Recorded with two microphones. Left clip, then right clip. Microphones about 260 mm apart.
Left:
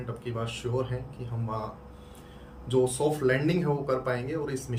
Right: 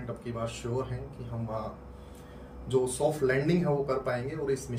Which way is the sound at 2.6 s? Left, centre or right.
Centre.